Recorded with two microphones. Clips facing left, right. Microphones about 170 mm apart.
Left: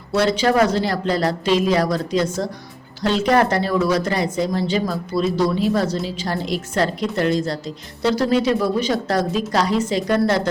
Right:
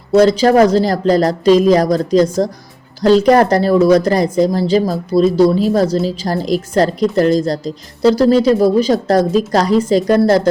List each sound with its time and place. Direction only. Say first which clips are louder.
0.1 s a woman's voice: right 8 dB; 40° right (ahead or behind)